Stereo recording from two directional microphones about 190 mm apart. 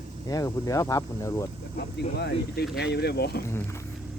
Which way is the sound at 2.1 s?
60° left (ahead or behind).